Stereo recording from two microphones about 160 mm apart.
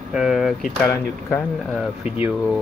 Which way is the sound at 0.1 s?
Centre (ahead or behind).